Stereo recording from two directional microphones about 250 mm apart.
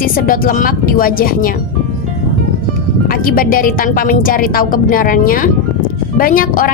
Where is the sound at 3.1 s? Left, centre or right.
Left.